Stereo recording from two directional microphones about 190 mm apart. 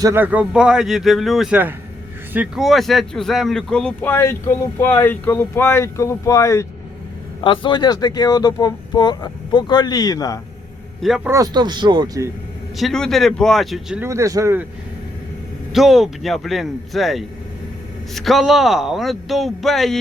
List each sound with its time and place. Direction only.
0.0 s a man's voice: 10° right (ahead or behind); by 10.4 s 20° left (ahead or behind)
11.0 s a man's voice: centre (ahead or behind)
11.3 s speech: 20° right (ahead or behind)
12.7 s a man's voice: centre (ahead or behind)
14.1 s speech: 15° right (ahead or behind)
15.7 s a man's voice: centre (ahead or behind)